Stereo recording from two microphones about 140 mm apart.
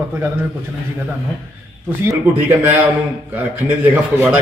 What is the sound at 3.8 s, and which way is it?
Speech, 15° right (ahead or behind).